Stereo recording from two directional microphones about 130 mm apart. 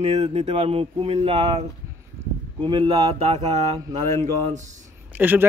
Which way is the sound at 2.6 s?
40° right (ahead or behind).